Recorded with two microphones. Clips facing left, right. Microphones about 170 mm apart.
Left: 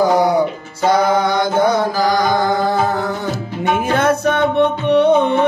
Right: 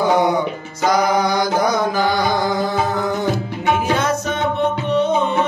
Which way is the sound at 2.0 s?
45° left (ahead or behind).